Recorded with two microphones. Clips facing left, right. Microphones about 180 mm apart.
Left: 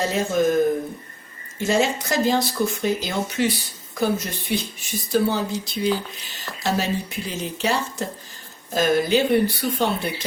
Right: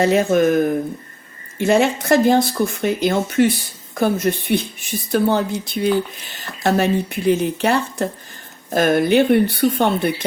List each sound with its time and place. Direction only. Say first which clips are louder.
0.0 s speech: right 6 dB; 65° right (ahead or behind)
1.5 s speech: right 5 dB; 60° right (ahead or behind)